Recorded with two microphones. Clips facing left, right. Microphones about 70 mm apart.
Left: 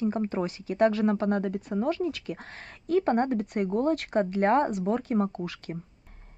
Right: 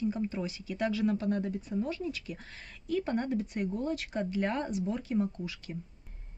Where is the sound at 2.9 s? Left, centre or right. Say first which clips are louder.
Left 7 dB; left.